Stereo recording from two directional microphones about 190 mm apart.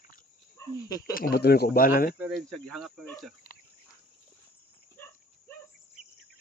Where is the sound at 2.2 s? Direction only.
Centre (ahead or behind).